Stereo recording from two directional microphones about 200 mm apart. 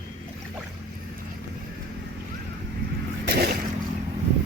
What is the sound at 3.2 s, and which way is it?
Boat, 55° right (ahead or behind).